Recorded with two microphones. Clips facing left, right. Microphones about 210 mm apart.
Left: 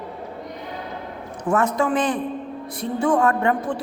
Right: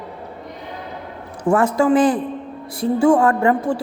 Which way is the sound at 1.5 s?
30° right (ahead or behind).